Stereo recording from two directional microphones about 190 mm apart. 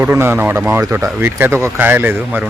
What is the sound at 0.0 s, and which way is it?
Speech, 10° right (ahead or behind).